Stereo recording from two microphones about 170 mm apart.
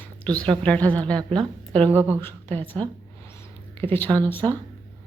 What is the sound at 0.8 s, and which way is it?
A woman's voice, 20° right (ahead or behind).